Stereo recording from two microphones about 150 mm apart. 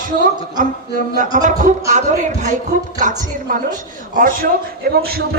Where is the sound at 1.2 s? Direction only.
55° right (ahead or behind).